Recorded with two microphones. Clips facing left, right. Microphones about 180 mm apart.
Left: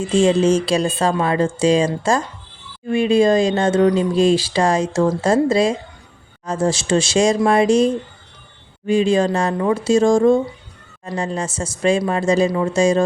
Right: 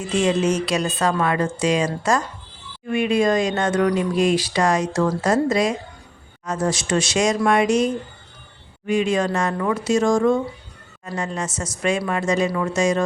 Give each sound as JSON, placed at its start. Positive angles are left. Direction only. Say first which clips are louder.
{"t": 0.0, "sound": "speech", "louder": "left 5 dB", "side_deg": 30}